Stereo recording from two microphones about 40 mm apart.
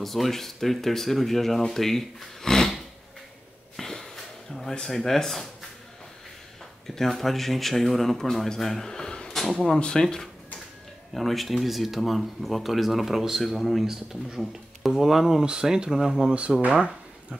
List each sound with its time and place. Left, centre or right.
0.0 s speech: centre
3.7 s snort: centre
4.8 s speech: centre
7.0 s speech: centre
8.8 s a sound: centre
9.3 s speech: centre
9.8 s speech: centre
11.1 s speech: centre
16.7 s a sound: right